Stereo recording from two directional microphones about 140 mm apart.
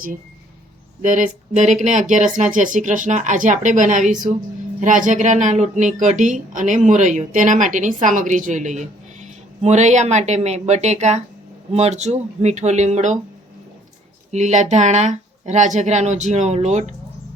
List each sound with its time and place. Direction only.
1.0 s a woman's voice: 70° right (ahead or behind)
14.3 s a woman's voice: 55° right (ahead or behind)